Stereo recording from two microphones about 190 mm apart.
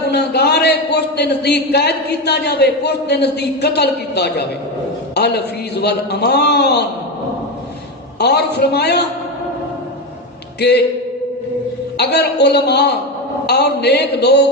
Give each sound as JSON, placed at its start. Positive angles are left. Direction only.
{"t": 0.1, "sound": "a man's voice", "side_deg": 60}
{"t": 8.2, "sound": "a man's voice", "side_deg": 60}
{"t": 10.6, "sound": "a man's voice", "side_deg": 60}
{"t": 11.9, "sound": "a man's voice", "side_deg": 60}